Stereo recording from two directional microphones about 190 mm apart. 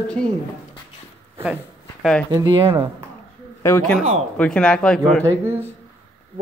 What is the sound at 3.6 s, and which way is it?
Speech, 10° left (ahead or behind).